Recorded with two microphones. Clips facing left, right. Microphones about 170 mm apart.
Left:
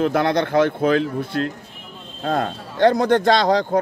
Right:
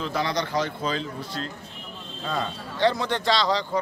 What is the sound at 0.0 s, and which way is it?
Speech, 55° left (ahead or behind).